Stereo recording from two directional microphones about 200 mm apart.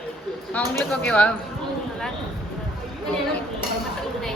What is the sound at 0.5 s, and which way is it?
Speech, 5° left (ahead or behind).